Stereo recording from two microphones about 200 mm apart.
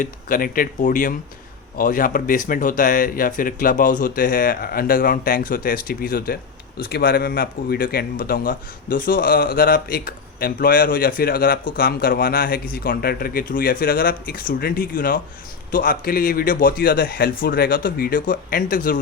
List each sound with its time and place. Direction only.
0.0 s speech: 45° left (ahead or behind)